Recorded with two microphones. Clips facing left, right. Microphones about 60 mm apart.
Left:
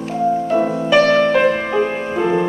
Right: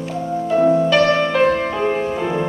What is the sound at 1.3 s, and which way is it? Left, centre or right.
Music, centre.